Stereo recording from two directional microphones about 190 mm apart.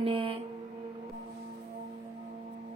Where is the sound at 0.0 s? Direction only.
30° right (ahead or behind).